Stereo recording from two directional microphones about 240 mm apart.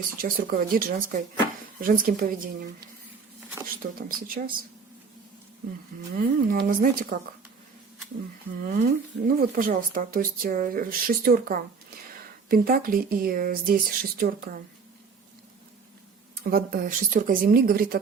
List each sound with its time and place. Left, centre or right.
0.2 s speech: right
3.9 s speech: right
6.1 s speech: right
8.6 s speech: right
16.3 s speech: right